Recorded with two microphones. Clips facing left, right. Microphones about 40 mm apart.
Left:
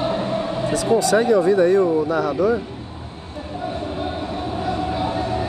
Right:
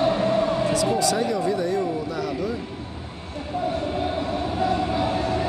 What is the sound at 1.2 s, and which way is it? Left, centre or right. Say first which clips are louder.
Speech: left 8 dB; left.